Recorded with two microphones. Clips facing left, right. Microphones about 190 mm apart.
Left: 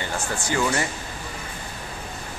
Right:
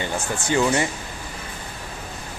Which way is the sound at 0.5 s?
20° right (ahead or behind).